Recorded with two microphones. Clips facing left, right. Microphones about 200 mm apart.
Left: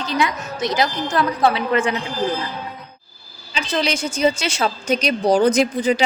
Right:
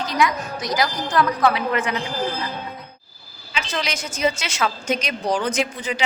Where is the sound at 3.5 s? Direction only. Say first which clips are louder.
Left 5 dB; 30° left (ahead or behind).